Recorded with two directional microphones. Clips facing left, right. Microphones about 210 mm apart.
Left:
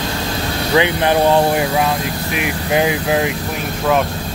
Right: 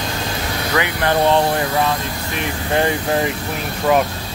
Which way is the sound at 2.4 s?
10° left (ahead or behind).